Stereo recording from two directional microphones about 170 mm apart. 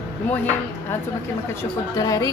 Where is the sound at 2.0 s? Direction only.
20° left (ahead or behind).